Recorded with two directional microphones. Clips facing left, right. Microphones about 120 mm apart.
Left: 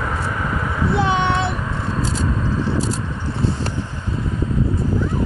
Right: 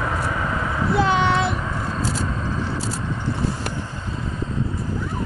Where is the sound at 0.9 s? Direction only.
20° left (ahead or behind).